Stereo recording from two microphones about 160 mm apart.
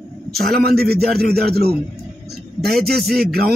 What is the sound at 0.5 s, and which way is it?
A man's voice, 75° right (ahead or behind).